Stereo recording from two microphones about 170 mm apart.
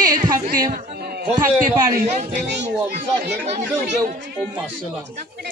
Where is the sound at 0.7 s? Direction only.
50° right (ahead or behind).